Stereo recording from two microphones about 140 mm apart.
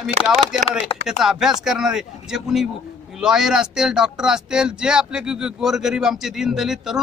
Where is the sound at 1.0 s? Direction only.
5° right (ahead or behind).